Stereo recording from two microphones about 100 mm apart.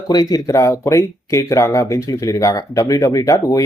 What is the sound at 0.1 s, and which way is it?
Speech, 40° left (ahead or behind).